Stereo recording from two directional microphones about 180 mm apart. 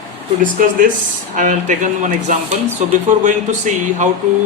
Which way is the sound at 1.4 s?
45° right (ahead or behind).